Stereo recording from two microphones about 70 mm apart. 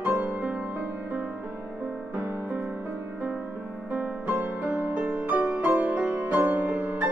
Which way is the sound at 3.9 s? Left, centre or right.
Right.